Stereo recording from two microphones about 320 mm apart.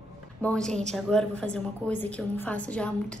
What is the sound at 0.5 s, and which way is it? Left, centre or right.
A woman's voice, centre.